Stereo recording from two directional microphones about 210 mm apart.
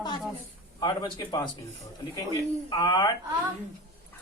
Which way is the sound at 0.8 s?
20° left (ahead or behind).